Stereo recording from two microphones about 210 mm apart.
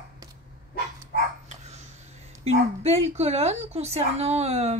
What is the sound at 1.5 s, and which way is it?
A woman's voice, 30° right (ahead or behind).